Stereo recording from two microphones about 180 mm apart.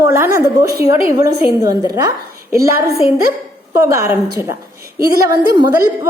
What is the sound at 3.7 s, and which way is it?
A woman's voice, 15° right (ahead or behind).